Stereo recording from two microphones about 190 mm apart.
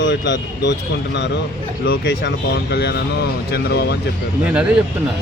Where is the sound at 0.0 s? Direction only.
70° left (ahead or behind).